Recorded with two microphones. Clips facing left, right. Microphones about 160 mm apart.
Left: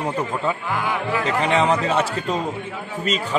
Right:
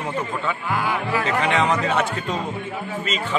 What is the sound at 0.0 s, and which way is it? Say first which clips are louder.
A man's voice: left 3 dB; 35° left (ahead or behind).